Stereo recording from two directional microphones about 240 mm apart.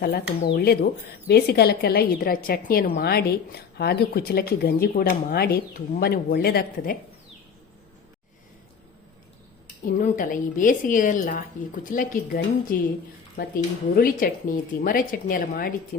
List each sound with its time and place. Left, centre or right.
0.0 s a woman's voice: left
10.0 s a woman's voice: left
13.9 s a woman's voice: left